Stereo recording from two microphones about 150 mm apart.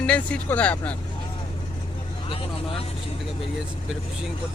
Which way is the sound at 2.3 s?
40° left (ahead or behind).